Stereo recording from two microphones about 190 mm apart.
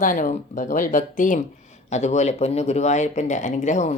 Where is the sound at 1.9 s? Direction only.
35° left (ahead or behind).